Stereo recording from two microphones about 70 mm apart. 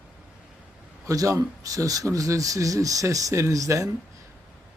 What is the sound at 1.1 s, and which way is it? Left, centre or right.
Speech, right.